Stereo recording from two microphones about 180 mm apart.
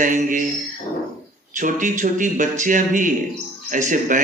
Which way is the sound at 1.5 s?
45° right (ahead or behind).